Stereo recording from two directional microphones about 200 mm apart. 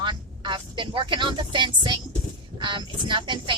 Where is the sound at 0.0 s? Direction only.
25° right (ahead or behind).